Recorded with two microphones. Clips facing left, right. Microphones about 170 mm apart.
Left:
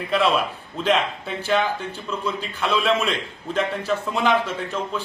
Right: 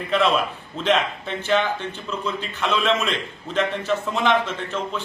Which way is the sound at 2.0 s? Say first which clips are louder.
Left 1 dB; 10° left (ahead or behind).